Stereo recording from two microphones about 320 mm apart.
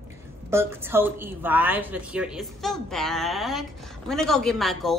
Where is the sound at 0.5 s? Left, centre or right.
Centre.